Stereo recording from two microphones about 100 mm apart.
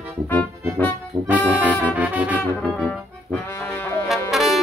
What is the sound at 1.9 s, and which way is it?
Music, 15° right (ahead or behind).